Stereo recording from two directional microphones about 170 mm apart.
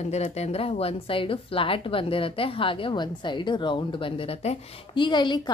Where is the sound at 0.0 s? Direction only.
40° left (ahead or behind).